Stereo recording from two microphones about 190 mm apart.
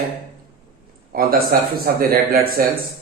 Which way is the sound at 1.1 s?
50° right (ahead or behind).